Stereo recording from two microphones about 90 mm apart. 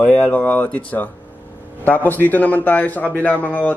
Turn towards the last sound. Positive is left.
turn(degrees=20)  # may be behind; listen again after turning